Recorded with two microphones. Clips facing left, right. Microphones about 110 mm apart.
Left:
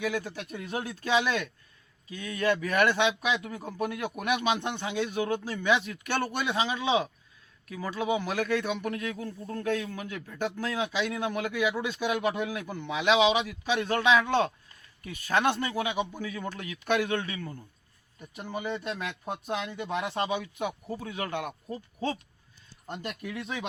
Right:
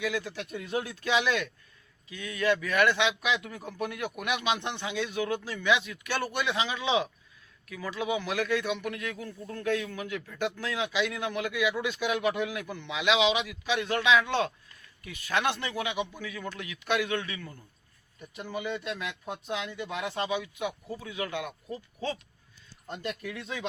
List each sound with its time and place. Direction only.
0.0 s speech: 30° left (ahead or behind)